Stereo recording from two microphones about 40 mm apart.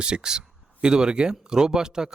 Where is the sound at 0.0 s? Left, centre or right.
Right.